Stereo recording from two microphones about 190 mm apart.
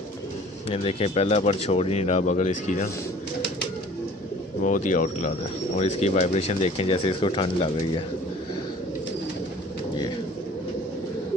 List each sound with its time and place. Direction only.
0.7 s speech: 30° left (ahead or behind)
4.6 s speech: 40° left (ahead or behind)